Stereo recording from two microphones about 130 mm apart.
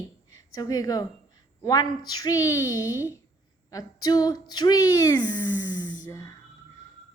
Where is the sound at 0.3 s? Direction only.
25° left (ahead or behind).